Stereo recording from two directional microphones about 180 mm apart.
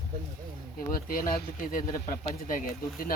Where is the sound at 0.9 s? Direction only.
50° left (ahead or behind).